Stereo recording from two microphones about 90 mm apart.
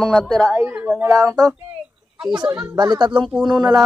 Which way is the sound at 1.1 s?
45° right (ahead or behind).